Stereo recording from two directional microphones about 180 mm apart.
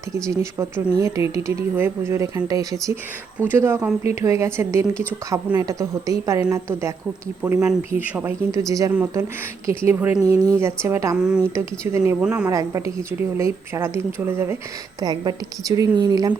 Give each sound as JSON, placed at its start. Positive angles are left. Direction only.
{"t": 0.1, "sound": "speech", "side_deg": -15}
{"t": 12.5, "sound": "a woman's voice", "side_deg": -20}